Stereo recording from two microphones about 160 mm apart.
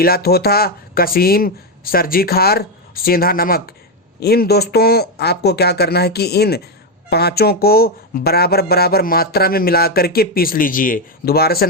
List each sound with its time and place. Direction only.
0.0 s speech: 70° left (ahead or behind)
4.2 s speech: 80° left